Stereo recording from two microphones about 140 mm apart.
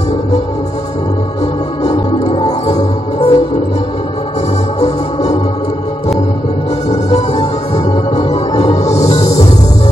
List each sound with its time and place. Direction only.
1.8 s music: 50° left (ahead or behind)
2.2 s music: 35° left (ahead or behind)
2.7 s music: 45° left (ahead or behind)
4.7 s organ: 50° left (ahead or behind)
7.7 s music: 45° left (ahead or behind)